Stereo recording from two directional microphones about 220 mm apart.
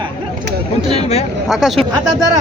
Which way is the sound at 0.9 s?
30° left (ahead or behind).